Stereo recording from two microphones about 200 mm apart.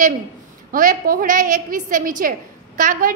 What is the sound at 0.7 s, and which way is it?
A child's voice, 45° right (ahead or behind).